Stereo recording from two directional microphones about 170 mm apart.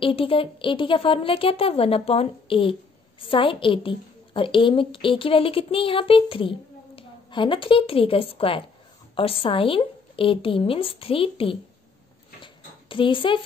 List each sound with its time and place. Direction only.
0.0 s a woman's voice: 30° left (ahead or behind)
12.9 s a woman's voice: 30° left (ahead or behind)